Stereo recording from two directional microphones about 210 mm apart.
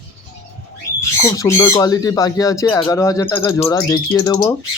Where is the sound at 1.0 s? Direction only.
15° left (ahead or behind).